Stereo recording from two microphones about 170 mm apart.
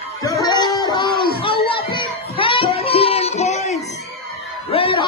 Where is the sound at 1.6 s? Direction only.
30° left (ahead or behind).